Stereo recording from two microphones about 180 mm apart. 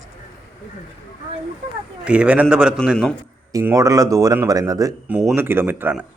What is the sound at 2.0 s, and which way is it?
A man's voice, 5° right (ahead or behind).